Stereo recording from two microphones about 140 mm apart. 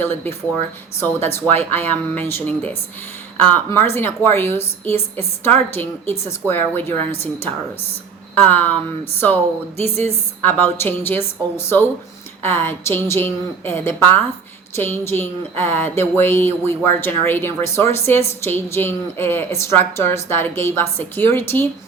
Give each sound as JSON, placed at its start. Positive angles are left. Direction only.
{"t": 0.9, "sound": "a woman's voice", "side_deg": 15}